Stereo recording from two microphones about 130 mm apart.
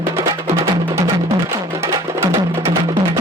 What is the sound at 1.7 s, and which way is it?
Music, 20° right (ahead or behind).